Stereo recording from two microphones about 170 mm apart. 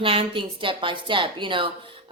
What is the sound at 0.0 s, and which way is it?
Speech, 30° right (ahead or behind).